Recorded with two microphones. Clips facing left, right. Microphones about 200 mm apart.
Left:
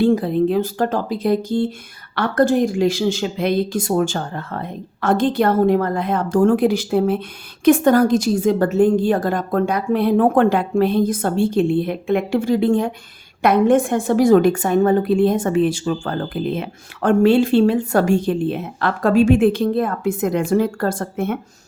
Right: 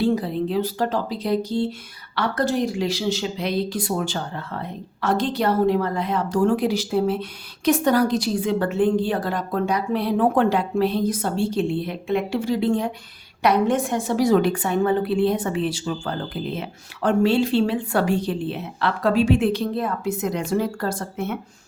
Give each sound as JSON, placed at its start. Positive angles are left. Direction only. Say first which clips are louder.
{"t": 0.0, "sound": "speech", "louder": "left 6 dB", "side_deg": 50}